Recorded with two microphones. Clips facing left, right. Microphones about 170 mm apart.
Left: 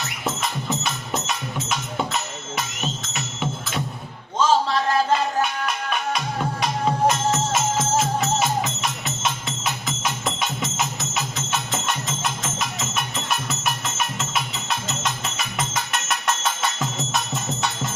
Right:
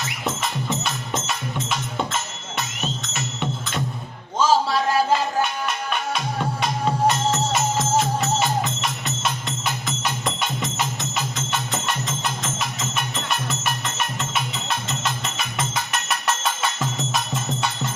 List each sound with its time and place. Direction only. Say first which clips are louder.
0.3 s music: even; centre (ahead or behind)